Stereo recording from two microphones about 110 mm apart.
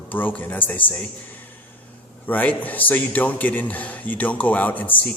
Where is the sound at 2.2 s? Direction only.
15° left (ahead or behind).